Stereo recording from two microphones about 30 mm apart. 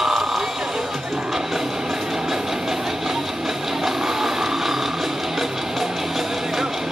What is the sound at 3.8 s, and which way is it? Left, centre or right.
Music, centre.